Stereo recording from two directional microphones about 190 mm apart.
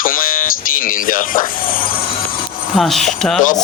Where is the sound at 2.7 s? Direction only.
Centre (ahead or behind).